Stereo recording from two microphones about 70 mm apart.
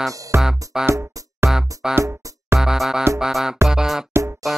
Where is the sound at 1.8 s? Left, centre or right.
Centre.